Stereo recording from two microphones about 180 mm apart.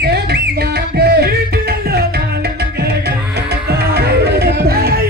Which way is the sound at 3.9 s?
65° right (ahead or behind).